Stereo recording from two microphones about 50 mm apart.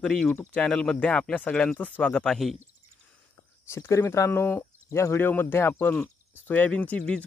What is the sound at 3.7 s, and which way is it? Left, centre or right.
Speech, left.